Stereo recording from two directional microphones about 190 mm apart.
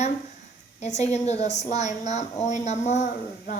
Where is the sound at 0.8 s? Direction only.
35° left (ahead or behind).